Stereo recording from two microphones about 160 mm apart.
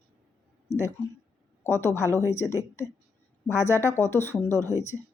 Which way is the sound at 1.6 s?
15° left (ahead or behind).